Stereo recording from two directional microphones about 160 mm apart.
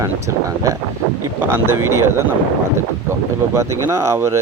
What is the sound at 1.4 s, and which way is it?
Speech, 15° right (ahead or behind).